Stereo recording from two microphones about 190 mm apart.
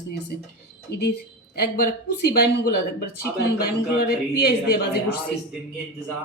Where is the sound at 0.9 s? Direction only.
60° left (ahead or behind).